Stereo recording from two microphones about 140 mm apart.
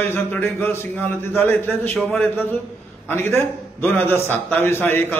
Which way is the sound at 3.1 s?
15° left (ahead or behind).